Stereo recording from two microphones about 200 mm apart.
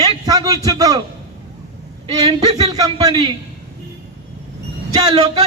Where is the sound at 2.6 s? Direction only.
20° right (ahead or behind).